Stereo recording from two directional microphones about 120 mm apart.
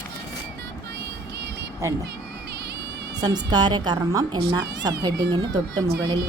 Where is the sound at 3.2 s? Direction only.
35° right (ahead or behind).